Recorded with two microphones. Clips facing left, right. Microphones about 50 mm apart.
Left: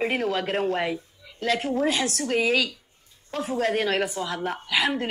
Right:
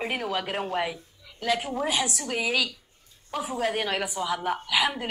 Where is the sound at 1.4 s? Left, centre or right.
Centre.